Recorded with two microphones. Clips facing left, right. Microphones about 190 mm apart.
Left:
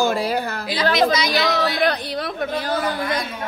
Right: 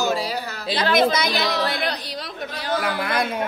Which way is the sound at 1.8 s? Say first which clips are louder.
Left 7 dB; 55° left (ahead or behind).